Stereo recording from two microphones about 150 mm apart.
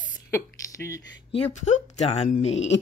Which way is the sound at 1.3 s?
50° left (ahead or behind).